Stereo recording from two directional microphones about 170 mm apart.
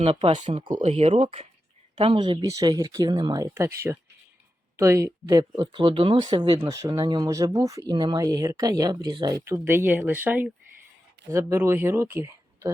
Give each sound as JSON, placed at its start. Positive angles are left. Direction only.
{"t": 0.0, "sound": "speech", "side_deg": -35}
{"t": 4.8, "sound": "speech", "side_deg": -15}